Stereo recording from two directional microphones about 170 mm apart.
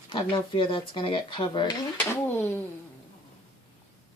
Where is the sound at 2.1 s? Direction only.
10° left (ahead or behind).